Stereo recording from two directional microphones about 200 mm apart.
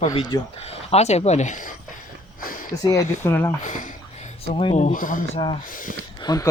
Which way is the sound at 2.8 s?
15° left (ahead or behind).